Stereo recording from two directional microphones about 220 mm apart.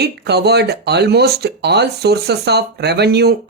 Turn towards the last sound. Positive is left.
turn(degrees=-50)  # may be behind; listen again after turning